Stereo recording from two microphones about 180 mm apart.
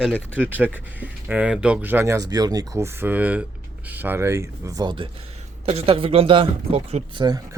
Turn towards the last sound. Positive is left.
turn(degrees=-25)  # may be behind; listen again after turning